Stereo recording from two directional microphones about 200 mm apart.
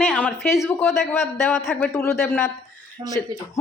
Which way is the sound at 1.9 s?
15° left (ahead or behind).